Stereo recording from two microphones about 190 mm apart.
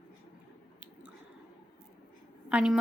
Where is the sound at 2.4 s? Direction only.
5° right (ahead or behind).